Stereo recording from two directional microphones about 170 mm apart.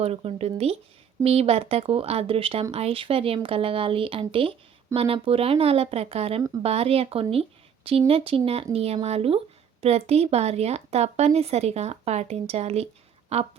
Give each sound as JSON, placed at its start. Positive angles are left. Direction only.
{"t": 0.0, "sound": "speech", "side_deg": -35}